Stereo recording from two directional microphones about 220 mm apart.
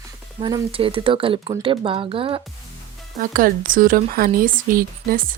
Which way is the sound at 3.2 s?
40° right (ahead or behind).